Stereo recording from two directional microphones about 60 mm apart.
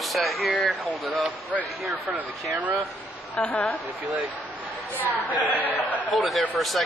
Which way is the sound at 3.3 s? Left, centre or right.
Left.